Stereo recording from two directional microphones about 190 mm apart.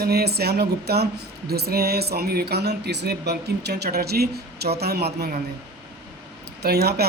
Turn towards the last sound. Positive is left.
turn(degrees=-55)  # may be behind; listen again after turning